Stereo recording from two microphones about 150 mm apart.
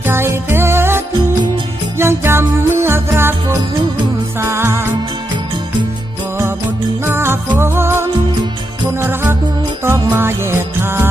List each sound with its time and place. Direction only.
0.0 s music: 15° right (ahead or behind)
4.4 s music: 15° right (ahead or behind)
7.0 s music: 15° right (ahead or behind)